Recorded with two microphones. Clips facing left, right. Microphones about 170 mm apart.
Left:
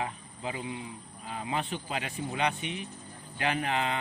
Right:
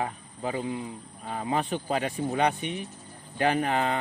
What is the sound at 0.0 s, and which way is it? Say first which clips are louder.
Speech: right 4 dB; 40° right (ahead or behind).